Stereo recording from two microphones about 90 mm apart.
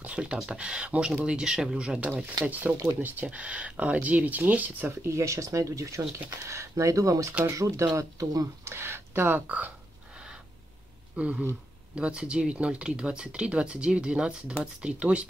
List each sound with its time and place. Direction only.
0.0 s a sound: 15° right (ahead or behind)
0.4 s speech: 10° right (ahead or behind)
5.0 s speech: 35° right (ahead or behind)
8.6 s speech: 25° right (ahead or behind)
11.1 s speech: 10° right (ahead or behind)